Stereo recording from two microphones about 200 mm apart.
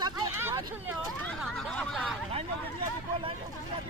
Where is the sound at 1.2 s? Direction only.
Centre (ahead or behind).